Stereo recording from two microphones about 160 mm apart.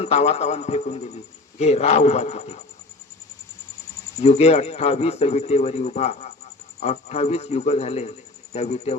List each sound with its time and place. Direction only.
0.0 s a man's voice: 40° left (ahead or behind)
4.2 s speech: 40° left (ahead or behind)